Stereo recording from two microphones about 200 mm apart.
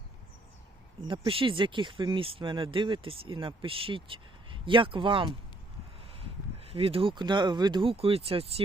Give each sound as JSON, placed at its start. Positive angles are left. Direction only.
{"t": 1.0, "sound": "speech", "side_deg": -25}
{"t": 6.7, "sound": "speech", "side_deg": -30}